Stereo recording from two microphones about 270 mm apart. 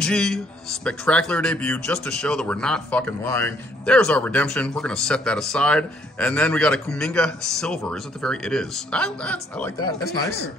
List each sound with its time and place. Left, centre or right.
0.0 s speech: centre